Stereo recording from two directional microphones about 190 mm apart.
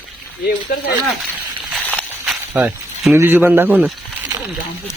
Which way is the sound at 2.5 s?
10° right (ahead or behind).